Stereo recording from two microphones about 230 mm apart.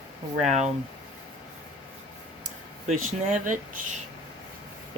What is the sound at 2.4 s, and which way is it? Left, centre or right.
Speech, right.